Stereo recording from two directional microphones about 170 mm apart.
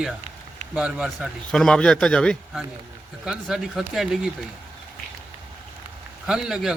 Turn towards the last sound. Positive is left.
turn(degrees=-5)  # may be behind; listen again after turning